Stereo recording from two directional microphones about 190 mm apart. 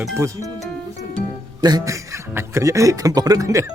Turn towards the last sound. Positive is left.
turn(degrees=-15)  # may be behind; listen again after turning